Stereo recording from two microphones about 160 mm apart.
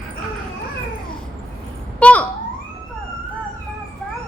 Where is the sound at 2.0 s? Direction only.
10° left (ahead or behind).